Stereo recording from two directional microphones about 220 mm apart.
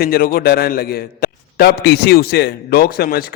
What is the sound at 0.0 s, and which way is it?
A man's voice, 45° left (ahead or behind).